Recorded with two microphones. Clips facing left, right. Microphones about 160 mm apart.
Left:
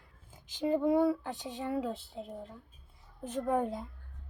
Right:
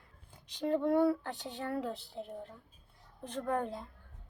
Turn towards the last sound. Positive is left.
turn(degrees=5)  # may be behind; listen again after turning